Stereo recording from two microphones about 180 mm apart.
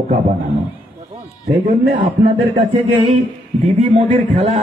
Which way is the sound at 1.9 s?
35° right (ahead or behind).